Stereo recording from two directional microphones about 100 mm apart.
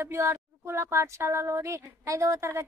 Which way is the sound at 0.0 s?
25° right (ahead or behind).